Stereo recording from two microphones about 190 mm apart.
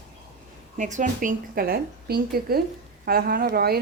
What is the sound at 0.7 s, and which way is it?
Speech, 40° right (ahead or behind).